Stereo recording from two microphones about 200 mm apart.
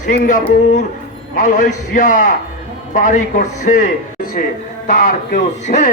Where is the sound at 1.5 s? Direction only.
40° left (ahead or behind).